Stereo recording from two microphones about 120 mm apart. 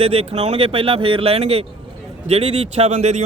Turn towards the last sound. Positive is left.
turn(degrees=-70)  # may be behind; listen again after turning